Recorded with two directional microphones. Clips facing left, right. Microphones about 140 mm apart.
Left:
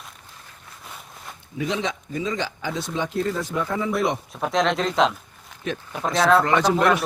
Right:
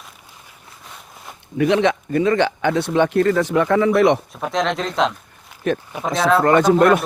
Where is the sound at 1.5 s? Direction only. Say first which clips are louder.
Right 10 dB; 65° right (ahead or behind).